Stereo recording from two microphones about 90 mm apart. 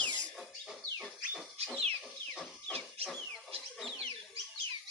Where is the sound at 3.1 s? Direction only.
Centre (ahead or behind).